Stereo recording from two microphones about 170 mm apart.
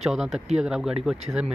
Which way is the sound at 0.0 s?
Centre (ahead or behind).